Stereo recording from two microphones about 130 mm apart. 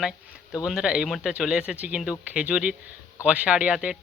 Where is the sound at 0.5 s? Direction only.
5° right (ahead or behind).